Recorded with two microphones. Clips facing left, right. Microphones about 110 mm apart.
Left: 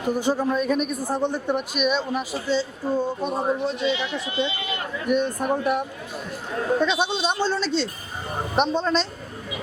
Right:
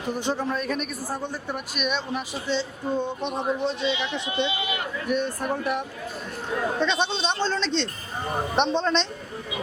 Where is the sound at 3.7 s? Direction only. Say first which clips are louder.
Left 2 dB; 20° right (ahead or behind).